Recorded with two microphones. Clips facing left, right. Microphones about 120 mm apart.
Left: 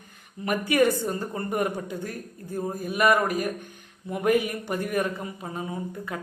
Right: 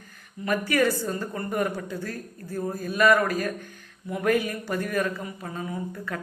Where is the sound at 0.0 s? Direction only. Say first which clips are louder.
Left 1 dB; 20° left (ahead or behind).